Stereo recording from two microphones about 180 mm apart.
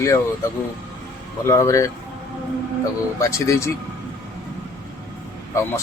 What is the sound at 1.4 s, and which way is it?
Speech, 15° left (ahead or behind).